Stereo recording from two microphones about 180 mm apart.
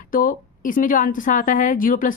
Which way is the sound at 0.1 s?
50° left (ahead or behind).